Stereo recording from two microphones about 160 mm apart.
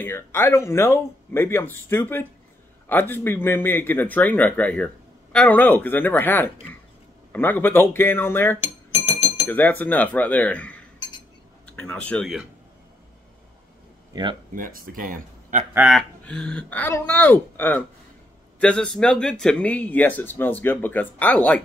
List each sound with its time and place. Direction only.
0.0 s speech: 15° left (ahead or behind)
14.5 s speech: 60° right (ahead or behind)
15.9 s speech: 5° left (ahead or behind)